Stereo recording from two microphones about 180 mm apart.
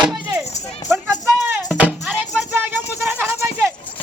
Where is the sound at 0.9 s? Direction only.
10° right (ahead or behind).